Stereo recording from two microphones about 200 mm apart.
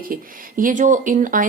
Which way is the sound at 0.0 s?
45° right (ahead or behind).